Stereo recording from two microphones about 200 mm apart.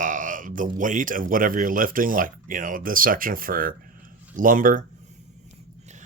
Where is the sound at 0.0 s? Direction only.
40° right (ahead or behind).